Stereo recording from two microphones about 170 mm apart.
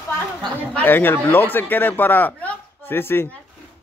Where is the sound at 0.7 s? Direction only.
10° left (ahead or behind).